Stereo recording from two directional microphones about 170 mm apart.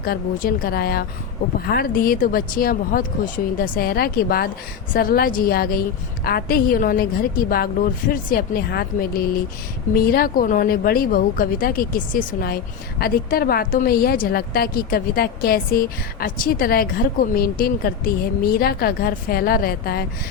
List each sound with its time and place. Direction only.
0.0 s a woman's voice: 60° left (ahead or behind)